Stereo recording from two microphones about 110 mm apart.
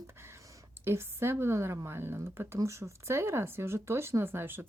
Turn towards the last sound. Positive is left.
turn(degrees=-20)  # may be behind; listen again after turning